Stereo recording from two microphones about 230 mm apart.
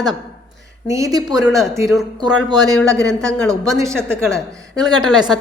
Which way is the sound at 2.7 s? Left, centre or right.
Centre.